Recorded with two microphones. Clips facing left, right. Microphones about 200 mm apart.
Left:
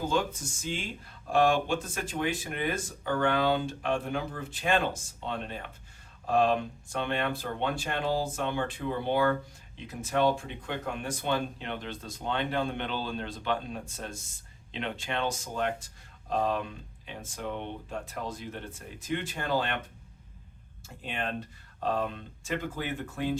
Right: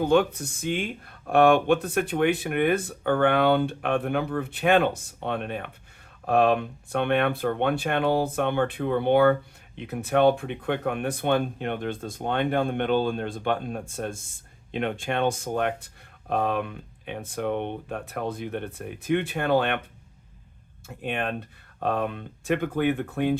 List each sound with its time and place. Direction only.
0.0 s speech: 60° right (ahead or behind)
20.8 s speech: 60° right (ahead or behind)